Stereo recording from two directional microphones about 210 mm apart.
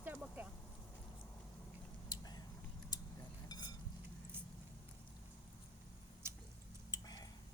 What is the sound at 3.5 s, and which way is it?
Chink, 20° left (ahead or behind).